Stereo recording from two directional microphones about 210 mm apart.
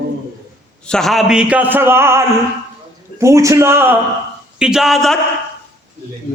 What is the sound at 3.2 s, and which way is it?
A man's voice, 15° right (ahead or behind).